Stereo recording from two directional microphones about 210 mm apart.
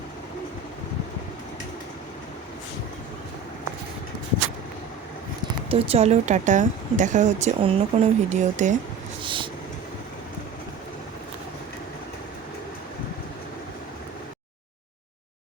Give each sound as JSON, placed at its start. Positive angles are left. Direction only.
{"t": 5.6, "sound": "speech", "side_deg": -25}
{"t": 9.2, "sound": "vehicle", "side_deg": -25}